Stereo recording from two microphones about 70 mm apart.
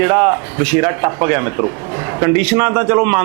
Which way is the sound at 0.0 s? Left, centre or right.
Right.